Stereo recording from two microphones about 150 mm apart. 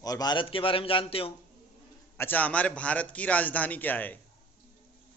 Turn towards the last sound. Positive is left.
turn(degrees=10)  # may be behind; listen again after turning